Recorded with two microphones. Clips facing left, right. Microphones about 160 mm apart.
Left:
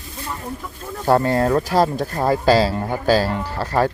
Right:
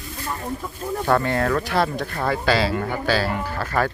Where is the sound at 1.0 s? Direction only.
35° left (ahead or behind).